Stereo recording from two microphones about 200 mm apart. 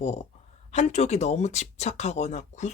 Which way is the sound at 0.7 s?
35° left (ahead or behind).